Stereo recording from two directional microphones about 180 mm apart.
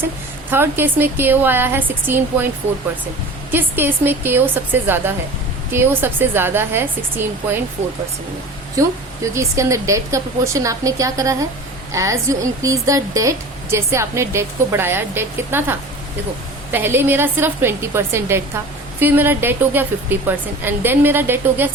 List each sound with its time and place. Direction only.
0.5 s a woman's voice: 10° right (ahead or behind)
3.5 s a woman's voice: 10° right (ahead or behind)
9.2 s a woman's voice: 15° right (ahead or behind)